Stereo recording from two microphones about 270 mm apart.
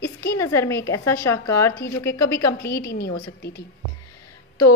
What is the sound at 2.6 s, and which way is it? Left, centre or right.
Speech, left.